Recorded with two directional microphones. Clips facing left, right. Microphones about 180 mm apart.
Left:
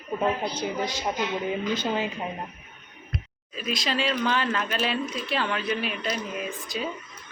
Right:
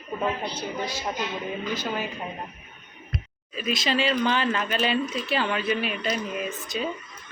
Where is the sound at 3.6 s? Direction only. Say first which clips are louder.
Right 3 dB; centre (ahead or behind).